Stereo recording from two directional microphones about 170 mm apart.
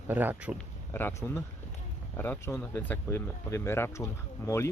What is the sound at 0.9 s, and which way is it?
Speech, 15° left (ahead or behind).